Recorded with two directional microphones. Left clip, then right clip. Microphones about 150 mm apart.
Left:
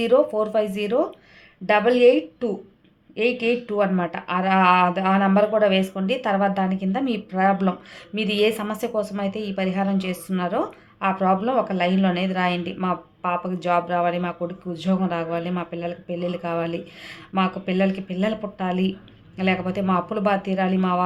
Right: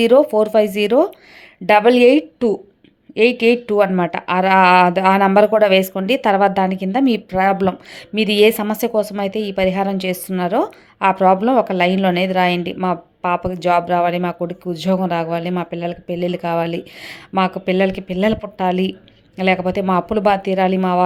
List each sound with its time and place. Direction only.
0.0 s a woman's voice: 50° right (ahead or behind)